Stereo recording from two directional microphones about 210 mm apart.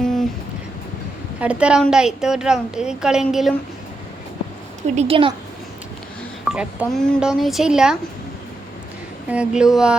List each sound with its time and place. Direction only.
0.0 s music: centre (ahead or behind)
1.4 s a woman's voice: 5° right (ahead or behind)
4.8 s a woman's voice: 30° right (ahead or behind)
6.4 s a woman's voice: 5° right (ahead or behind)
9.3 s a woman's voice: 5° right (ahead or behind)